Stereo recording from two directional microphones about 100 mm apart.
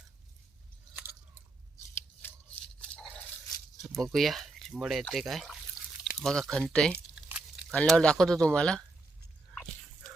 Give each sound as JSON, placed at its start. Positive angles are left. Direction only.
{"t": 2.8, "sound": "dog", "side_deg": 10}
{"t": 3.9, "sound": "speech", "side_deg": 5}